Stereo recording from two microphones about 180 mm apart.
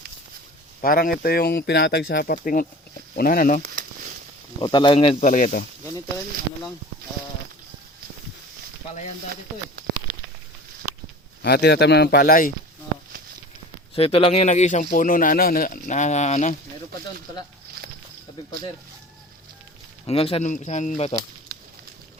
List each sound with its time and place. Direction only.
0.8 s speech: 50° left (ahead or behind)
3.6 s a sound: 50° right (ahead or behind)
4.6 s speech: 25° left (ahead or behind)
4.9 s speech: 40° left (ahead or behind)
11.4 s speech: 65° left (ahead or behind)
13.9 s a man's voice: 30° left (ahead or behind)
20.1 s a man's voice: 30° left (ahead or behind)
21.5 s a sound: 60° right (ahead or behind)